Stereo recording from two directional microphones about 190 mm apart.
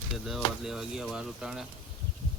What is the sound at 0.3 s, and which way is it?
Speech, centre (ahead or behind).